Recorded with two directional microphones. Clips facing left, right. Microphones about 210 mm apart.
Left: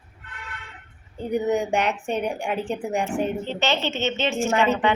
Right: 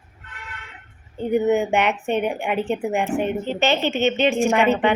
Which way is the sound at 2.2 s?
60° right (ahead or behind).